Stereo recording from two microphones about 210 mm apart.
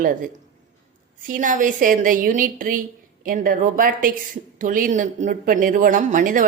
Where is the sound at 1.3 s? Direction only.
40° right (ahead or behind).